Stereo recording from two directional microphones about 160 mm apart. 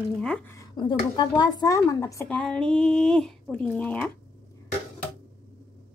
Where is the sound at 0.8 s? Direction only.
30° left (ahead or behind).